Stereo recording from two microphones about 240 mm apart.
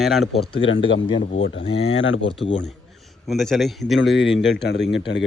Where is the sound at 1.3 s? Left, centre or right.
Left.